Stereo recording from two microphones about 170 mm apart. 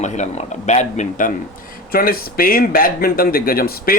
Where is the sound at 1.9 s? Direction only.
60° left (ahead or behind).